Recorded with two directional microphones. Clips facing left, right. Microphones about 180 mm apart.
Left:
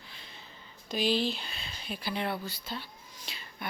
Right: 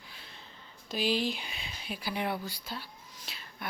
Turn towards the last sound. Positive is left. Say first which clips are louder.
# left 1 dB
turn(degrees=0)  # may be behind; listen again after turning